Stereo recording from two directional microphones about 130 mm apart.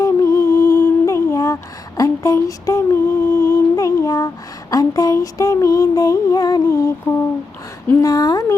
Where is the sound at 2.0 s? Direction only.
25° left (ahead or behind).